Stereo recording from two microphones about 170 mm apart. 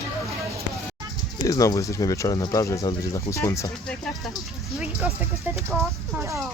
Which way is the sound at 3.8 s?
5° left (ahead or behind).